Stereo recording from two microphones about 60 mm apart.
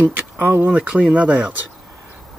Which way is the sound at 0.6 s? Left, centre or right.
Right.